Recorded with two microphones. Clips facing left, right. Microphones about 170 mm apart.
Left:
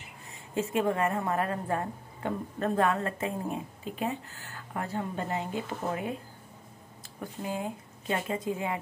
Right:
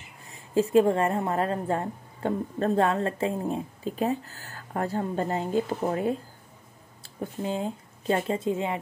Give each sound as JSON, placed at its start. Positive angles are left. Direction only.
{"t": 0.3, "sound": "a woman's voice", "side_deg": -35}
{"t": 7.2, "sound": "a woman's voice", "side_deg": -25}